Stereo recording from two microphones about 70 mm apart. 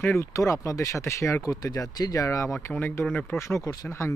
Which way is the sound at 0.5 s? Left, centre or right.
Left.